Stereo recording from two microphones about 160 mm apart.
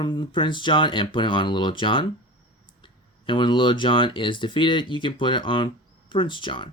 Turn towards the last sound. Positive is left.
turn(degrees=30)  # may be behind; listen again after turning